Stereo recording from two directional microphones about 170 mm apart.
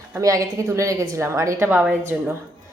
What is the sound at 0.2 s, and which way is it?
A woman's voice, 20° right (ahead or behind).